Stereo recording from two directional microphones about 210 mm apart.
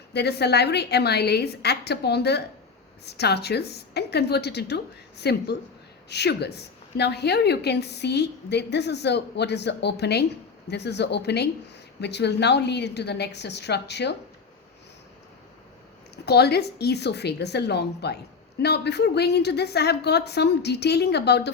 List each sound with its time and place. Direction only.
0.1 s a woman's voice: 50° left (ahead or behind)
16.1 s a woman's voice: 50° left (ahead or behind)